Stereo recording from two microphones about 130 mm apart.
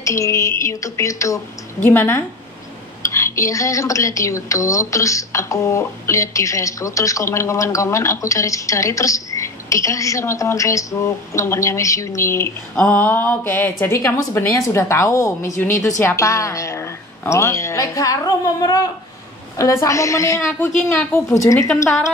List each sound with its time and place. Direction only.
0.0 s a woman's voice: 25° left (ahead or behind)
12.7 s a woman's voice: 10° left (ahead or behind)